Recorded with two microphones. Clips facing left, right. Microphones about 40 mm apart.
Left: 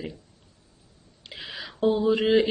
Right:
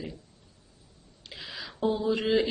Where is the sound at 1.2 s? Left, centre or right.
Centre.